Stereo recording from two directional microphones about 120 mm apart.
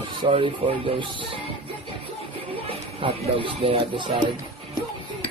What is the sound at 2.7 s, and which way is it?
Speech, 50° right (ahead or behind).